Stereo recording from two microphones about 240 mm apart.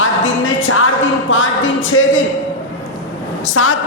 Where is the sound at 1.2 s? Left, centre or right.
Left.